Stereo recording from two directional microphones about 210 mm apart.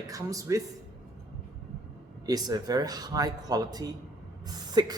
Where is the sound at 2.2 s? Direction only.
20° right (ahead or behind).